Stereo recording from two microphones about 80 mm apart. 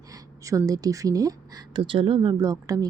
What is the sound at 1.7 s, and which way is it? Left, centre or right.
Speech, right.